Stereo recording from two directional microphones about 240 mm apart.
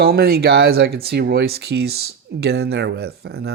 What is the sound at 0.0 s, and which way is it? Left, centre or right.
Speech, right.